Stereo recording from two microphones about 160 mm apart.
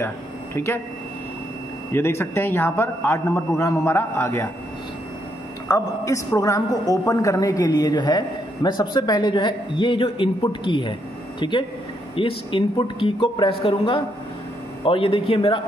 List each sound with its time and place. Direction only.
0.6 s a man's voice: 15° left (ahead or behind)
1.9 s a man's voice: 15° left (ahead or behind)
5.7 s a man's voice: 20° left (ahead or behind)